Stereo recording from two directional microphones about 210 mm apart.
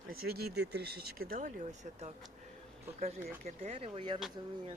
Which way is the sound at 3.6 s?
30° right (ahead or behind).